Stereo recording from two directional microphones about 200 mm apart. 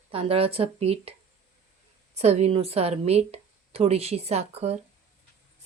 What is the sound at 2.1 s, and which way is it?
A woman's voice, 35° right (ahead or behind).